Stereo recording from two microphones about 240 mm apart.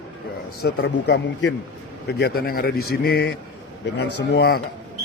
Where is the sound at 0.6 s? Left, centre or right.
Left.